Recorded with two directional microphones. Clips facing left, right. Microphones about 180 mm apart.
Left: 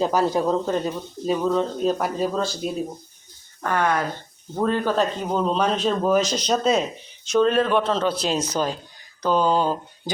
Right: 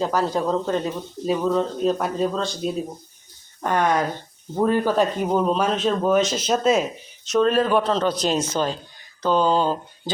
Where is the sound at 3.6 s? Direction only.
15° right (ahead or behind).